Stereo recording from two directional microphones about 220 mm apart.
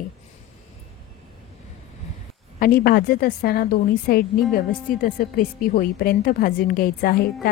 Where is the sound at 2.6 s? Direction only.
40° left (ahead or behind).